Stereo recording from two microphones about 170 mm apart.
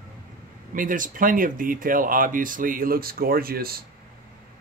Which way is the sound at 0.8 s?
50° right (ahead or behind).